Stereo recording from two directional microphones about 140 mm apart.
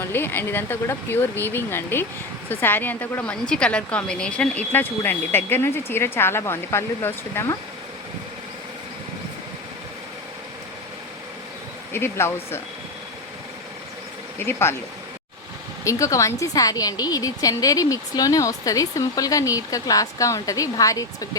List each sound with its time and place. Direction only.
0.0 s a woman's voice: 15° left (ahead or behind)
11.9 s a woman's voice: 15° left (ahead or behind)
14.3 s a woman's voice: 15° left (ahead or behind)
15.8 s a woman's voice: 20° left (ahead or behind)